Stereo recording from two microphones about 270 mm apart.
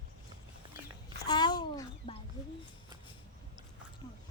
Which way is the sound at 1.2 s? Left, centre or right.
Centre.